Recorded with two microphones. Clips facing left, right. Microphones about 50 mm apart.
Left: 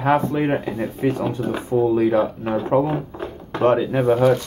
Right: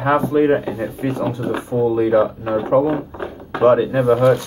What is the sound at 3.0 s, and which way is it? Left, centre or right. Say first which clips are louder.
Drawer open or close: right 2 dB; centre.